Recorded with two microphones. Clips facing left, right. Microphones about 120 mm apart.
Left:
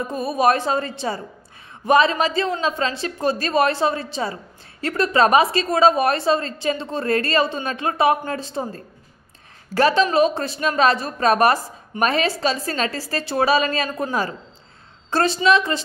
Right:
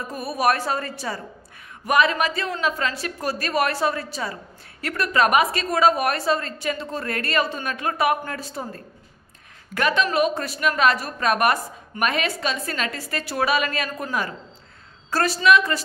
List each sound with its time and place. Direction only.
0.0 s a woman's voice: 20° left (ahead or behind)
13.8 s a woman's voice: 20° left (ahead or behind)